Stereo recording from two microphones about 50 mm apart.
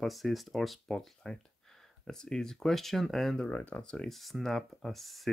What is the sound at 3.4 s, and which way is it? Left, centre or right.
Speech, left.